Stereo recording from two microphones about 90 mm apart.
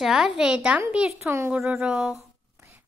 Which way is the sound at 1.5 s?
10° right (ahead or behind).